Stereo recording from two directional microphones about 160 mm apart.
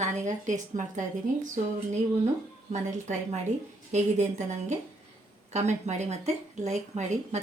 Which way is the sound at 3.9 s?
45° right (ahead or behind).